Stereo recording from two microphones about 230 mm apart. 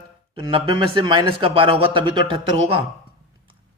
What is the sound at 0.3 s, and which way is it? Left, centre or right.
A man's voice, right.